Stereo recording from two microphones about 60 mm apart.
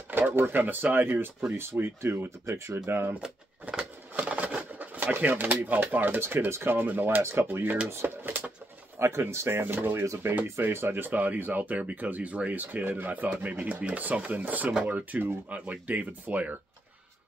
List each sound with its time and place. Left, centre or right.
0.1 s speech: right
4.1 s a sound: right
5.2 s speech: right